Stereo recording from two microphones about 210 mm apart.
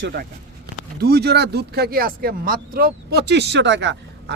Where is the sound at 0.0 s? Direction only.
45° right (ahead or behind).